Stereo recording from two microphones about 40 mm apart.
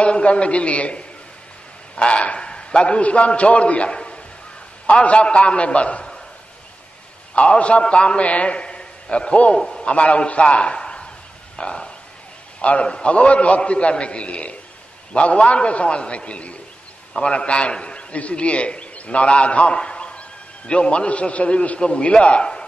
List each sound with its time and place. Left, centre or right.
0.0 s a man's voice: left
7.3 s a man's voice: left
9.6 s a man's voice: centre
9.8 s a man's voice: left
11.5 s a sound: left
12.6 s a man's voice: left